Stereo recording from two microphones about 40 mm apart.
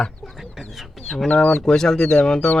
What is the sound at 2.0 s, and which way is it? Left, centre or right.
Speech, left.